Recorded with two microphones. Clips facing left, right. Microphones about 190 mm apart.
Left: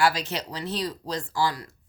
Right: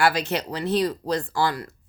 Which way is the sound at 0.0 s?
60° right (ahead or behind).